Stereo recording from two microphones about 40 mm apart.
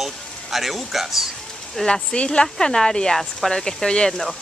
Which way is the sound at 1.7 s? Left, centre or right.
Centre.